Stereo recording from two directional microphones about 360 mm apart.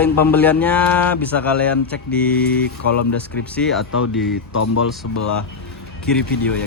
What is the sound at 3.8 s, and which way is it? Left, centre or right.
Speech, left.